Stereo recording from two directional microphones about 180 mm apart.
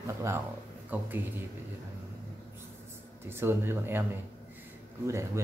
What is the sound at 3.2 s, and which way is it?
Speech, 15° right (ahead or behind).